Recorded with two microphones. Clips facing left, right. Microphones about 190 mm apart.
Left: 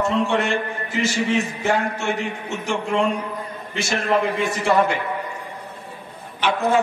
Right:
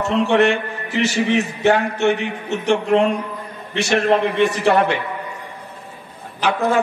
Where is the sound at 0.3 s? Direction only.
65° right (ahead or behind).